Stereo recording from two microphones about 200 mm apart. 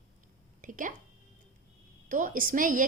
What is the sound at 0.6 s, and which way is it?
Speech, 40° right (ahead or behind).